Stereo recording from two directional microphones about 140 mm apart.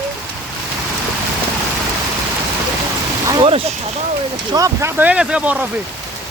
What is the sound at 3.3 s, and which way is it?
Speech, 35° right (ahead or behind).